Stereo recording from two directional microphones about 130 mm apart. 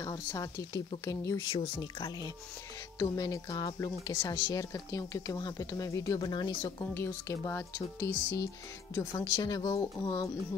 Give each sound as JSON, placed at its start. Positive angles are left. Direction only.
{"t": 0.0, "sound": "speech", "side_deg": 30}
{"t": 1.6, "sound": "speech", "side_deg": 35}
{"t": 6.8, "sound": "speech", "side_deg": 20}
{"t": 9.2, "sound": "speech", "side_deg": 30}